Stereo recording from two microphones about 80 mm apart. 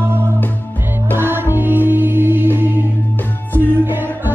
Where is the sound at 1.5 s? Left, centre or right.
Right.